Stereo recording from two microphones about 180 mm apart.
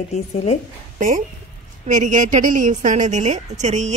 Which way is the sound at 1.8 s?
45° right (ahead or behind).